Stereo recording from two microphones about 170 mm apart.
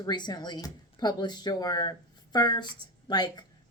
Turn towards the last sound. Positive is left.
turn(degrees=25)  # may be behind; listen again after turning